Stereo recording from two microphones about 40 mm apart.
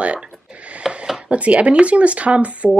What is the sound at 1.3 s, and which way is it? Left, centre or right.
Speech, right.